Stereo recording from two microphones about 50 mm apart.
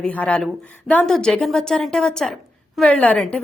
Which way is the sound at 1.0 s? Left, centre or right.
Centre.